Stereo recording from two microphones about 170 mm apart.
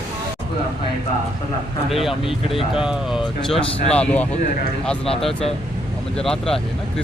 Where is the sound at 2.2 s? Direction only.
30° left (ahead or behind).